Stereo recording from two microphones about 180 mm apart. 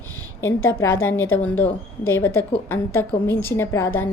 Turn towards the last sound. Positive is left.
turn(degrees=15)  # may be behind; listen again after turning